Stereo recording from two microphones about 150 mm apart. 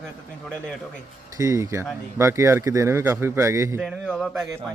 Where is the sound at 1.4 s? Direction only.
20° right (ahead or behind).